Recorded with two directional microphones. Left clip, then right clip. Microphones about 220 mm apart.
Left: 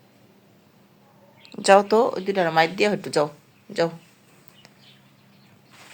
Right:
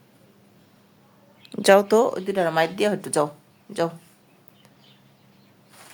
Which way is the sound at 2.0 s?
15° right (ahead or behind).